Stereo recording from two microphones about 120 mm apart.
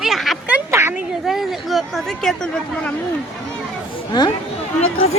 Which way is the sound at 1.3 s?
Centre (ahead or behind).